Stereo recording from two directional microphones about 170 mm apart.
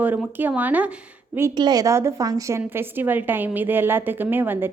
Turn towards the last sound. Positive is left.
turn(degrees=-10)  # may be behind; listen again after turning